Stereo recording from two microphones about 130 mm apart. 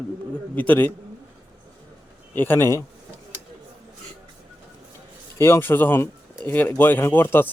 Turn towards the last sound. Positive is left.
turn(degrees=15)  # may be behind; listen again after turning